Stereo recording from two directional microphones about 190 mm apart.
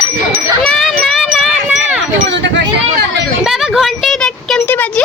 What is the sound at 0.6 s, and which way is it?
Children playing, centre (ahead or behind).